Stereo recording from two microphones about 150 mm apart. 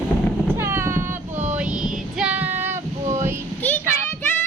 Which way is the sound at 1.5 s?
10° right (ahead or behind).